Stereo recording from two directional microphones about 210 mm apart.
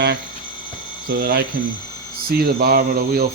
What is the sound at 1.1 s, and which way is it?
Speech, 50° right (ahead or behind).